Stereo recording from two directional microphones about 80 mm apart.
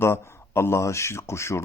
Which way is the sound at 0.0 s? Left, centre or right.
Left.